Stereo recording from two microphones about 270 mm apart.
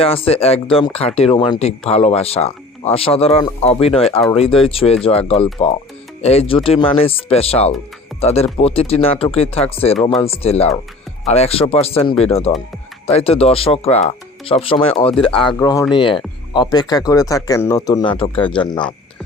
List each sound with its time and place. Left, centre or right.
0.0 s speech: left